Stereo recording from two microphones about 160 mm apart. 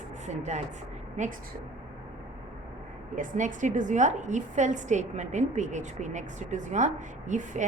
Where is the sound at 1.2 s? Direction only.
50° right (ahead or behind).